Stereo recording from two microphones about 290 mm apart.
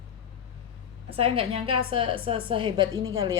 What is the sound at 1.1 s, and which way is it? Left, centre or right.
A woman's voice, centre.